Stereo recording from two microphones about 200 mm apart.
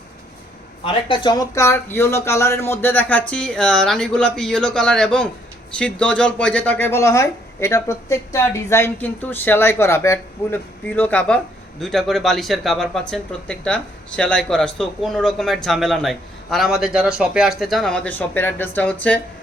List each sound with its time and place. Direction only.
0.9 s speech: 25° left (ahead or behind); by 19.2 s 10° left (ahead or behind)